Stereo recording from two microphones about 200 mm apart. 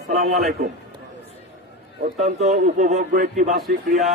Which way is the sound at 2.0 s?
35° right (ahead or behind).